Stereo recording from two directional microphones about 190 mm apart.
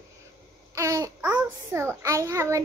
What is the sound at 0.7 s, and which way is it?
A child's voice, 15° right (ahead or behind).